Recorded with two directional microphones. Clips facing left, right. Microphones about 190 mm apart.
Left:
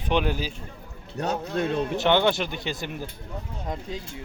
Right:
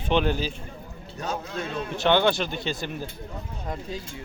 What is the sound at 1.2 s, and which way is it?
Speech, 65° left (ahead or behind).